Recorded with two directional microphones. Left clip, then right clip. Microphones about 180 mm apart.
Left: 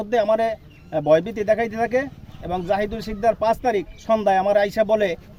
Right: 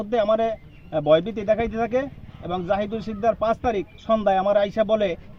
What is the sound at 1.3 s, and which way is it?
Speech, 5° left (ahead or behind).